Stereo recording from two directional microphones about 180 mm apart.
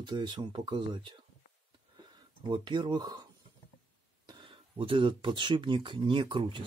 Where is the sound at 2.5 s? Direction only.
25° right (ahead or behind).